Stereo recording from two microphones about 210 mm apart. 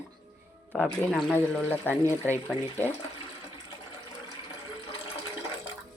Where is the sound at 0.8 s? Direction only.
5° left (ahead or behind).